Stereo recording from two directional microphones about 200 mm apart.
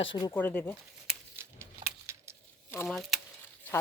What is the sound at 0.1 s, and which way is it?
Speech, 20° left (ahead or behind).